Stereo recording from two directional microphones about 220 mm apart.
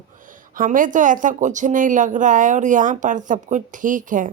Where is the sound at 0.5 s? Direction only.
40° right (ahead or behind).